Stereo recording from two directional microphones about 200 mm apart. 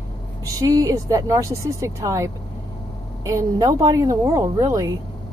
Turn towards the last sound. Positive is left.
turn(degrees=-15)  # may be behind; listen again after turning